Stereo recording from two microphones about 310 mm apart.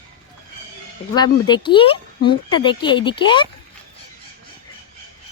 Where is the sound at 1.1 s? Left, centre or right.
Centre.